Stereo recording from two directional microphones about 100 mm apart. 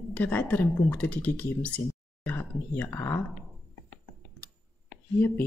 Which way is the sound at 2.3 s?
20° left (ahead or behind).